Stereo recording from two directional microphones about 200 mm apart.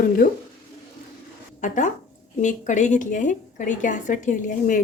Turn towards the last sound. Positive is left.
turn(degrees=40)  # may be behind; listen again after turning